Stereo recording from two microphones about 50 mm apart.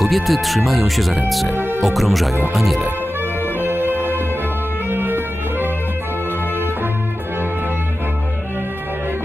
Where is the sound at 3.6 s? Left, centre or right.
Right.